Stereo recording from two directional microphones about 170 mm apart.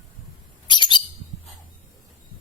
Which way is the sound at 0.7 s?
25° left (ahead or behind).